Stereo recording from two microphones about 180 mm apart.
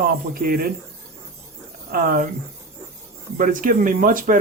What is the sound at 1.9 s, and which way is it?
Speech, 55° right (ahead or behind).